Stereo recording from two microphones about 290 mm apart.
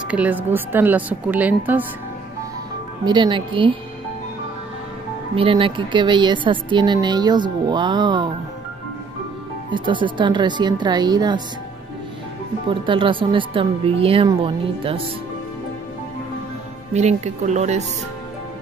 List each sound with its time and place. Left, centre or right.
0.1 s a woman's voice: centre
3.1 s a woman's voice: centre
5.3 s a woman's voice: centre
9.7 s a woman's voice: centre
12.6 s a woman's voice: centre
16.9 s speech: right